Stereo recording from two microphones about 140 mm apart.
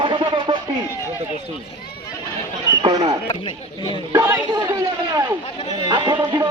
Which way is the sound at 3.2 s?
35° left (ahead or behind).